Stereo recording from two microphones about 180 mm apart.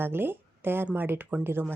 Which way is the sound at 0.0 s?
10° right (ahead or behind).